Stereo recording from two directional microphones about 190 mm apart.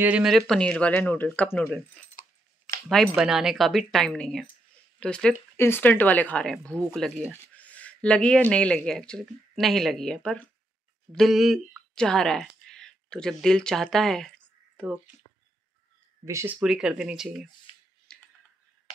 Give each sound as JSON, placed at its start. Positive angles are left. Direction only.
{"t": 0.0, "sound": "speech", "side_deg": -5}
{"t": 2.9, "sound": "speech", "side_deg": 0}
{"t": 16.3, "sound": "speech", "side_deg": -15}
{"t": 16.5, "sound": "speech", "side_deg": -5}
{"t": 17.7, "sound": "a sound", "side_deg": 30}
{"t": 18.1, "sound": "typing", "side_deg": 5}